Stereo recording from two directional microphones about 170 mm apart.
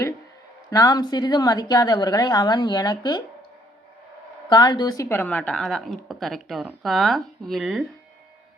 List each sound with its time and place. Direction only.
0.7 s a woman's voice: 20° left (ahead or behind)
4.4 s speech: 25° left (ahead or behind); by 7.9 s centre (ahead or behind)